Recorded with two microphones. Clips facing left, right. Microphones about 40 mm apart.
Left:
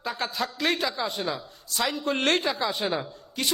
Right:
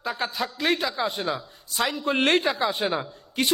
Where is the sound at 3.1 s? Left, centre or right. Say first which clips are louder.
Right 5 dB; right.